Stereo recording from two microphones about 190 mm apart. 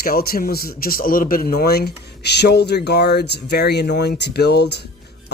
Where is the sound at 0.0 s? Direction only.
50° left (ahead or behind).